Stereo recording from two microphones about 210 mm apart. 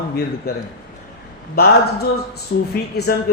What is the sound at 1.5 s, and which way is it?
A man's voice, 50° left (ahead or behind).